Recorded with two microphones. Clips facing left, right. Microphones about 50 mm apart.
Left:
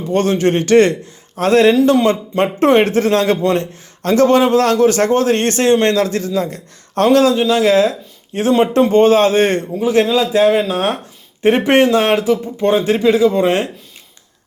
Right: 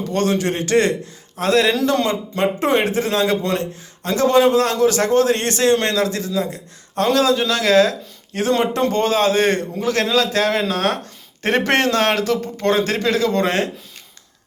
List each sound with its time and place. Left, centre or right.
0.1 s a man's voice: left
7.4 s a man's voice: left
9.8 s speech: centre